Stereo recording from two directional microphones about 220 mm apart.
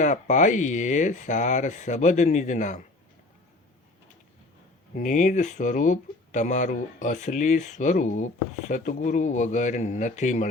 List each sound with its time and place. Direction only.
0.0 s speech: 35° left (ahead or behind)
4.9 s speech: 35° left (ahead or behind)